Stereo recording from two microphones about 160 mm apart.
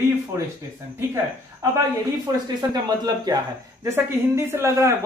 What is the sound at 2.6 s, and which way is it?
Speech, 25° right (ahead or behind).